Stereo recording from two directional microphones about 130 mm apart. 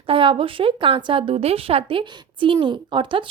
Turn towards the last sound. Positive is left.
turn(degrees=-40)  # may be behind; listen again after turning